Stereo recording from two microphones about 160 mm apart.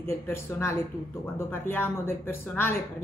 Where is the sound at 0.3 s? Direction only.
15° left (ahead or behind).